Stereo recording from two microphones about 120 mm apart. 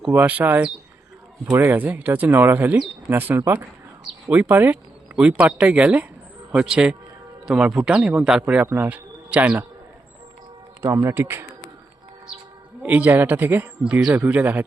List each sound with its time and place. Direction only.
0.1 s a man's voice: 15° right (ahead or behind)
10.9 s speech: 20° right (ahead or behind)
12.8 s a man's voice: 15° right (ahead or behind)